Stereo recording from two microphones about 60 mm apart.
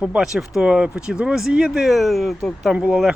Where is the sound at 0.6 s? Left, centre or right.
Centre.